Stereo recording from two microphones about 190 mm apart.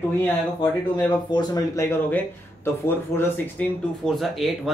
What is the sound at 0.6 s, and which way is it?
Speech, 20° left (ahead or behind).